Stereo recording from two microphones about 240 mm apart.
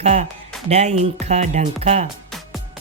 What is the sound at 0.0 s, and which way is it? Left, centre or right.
Speech, right.